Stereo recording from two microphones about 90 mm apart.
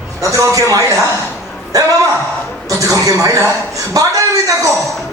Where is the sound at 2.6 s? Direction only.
40° right (ahead or behind).